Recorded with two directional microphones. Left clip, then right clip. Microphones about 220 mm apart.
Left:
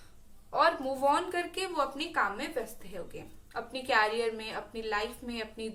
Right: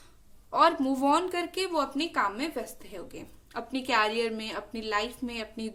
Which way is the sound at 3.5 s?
50° right (ahead or behind).